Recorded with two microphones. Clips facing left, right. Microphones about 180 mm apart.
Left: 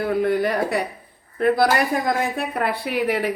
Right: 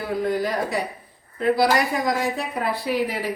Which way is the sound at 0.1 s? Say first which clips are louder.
Left 2 dB; 60° left (ahead or behind).